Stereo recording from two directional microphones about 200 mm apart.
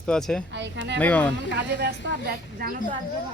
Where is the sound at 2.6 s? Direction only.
50° right (ahead or behind).